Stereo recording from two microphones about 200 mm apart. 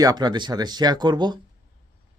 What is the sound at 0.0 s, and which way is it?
Speech, 20° right (ahead or behind).